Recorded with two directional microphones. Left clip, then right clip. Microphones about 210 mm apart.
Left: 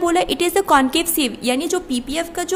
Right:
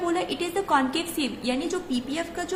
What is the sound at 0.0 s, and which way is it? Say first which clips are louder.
A woman's voice: left 9 dB; 55° left (ahead or behind).